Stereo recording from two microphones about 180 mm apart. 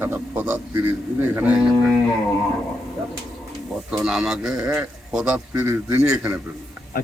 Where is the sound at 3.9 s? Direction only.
5° right (ahead or behind).